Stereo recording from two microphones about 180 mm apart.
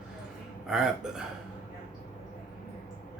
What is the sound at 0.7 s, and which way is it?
Speech, 5° right (ahead or behind).